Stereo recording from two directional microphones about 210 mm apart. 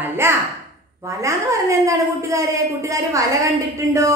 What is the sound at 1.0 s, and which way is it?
A woman's voice, 15° right (ahead or behind).